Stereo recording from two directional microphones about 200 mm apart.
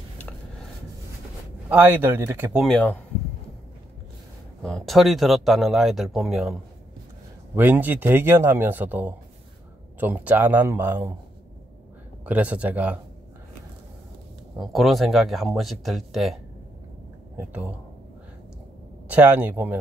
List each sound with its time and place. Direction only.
1.7 s a man's voice: 10° right (ahead or behind)
2.6 s speech: 5° left (ahead or behind)
4.6 s a man's voice: centre (ahead or behind)
12.3 s a man's voice: 5° right (ahead or behind)
14.6 s speech: centre (ahead or behind)
17.4 s a man's voice: 5° right (ahead or behind)
19.0 s a man's voice: 10° right (ahead or behind)